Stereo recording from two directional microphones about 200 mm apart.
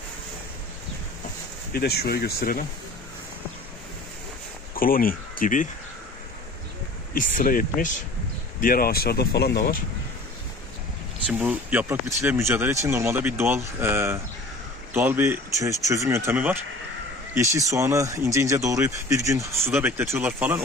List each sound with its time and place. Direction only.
1.7 s speech: 50° left (ahead or behind)
4.7 s speech: 45° left (ahead or behind)
7.2 s speech: 45° left (ahead or behind)
11.2 s speech: 10° right (ahead or behind)